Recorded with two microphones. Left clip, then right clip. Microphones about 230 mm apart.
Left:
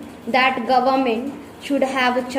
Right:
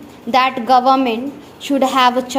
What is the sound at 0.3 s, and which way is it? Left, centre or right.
A woman's voice, right.